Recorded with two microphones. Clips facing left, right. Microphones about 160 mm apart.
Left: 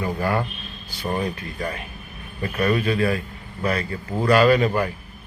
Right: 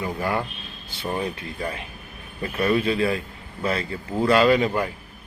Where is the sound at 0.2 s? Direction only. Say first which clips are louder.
Left 2 dB; 20° right (ahead or behind).